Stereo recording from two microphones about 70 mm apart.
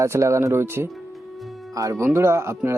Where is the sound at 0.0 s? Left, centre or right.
Right.